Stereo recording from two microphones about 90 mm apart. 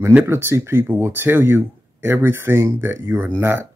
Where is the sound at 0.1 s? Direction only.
25° right (ahead or behind).